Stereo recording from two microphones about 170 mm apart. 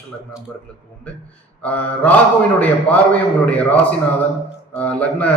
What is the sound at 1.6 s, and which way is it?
Speech, 10° left (ahead or behind).